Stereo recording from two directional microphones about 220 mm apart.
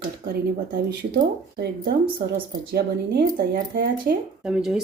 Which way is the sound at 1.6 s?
45° right (ahead or behind).